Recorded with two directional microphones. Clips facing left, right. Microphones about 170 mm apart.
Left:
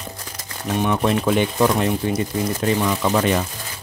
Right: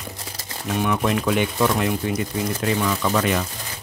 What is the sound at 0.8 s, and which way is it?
Speech, 25° left (ahead or behind).